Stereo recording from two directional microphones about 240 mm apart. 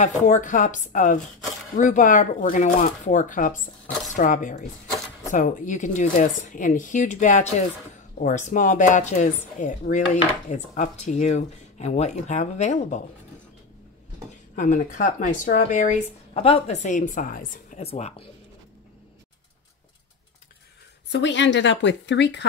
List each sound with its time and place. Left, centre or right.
0.0 s speech: left
14.5 s speech: left
21.1 s speech: left